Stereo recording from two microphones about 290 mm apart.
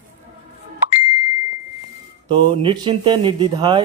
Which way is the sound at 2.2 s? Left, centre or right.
Centre.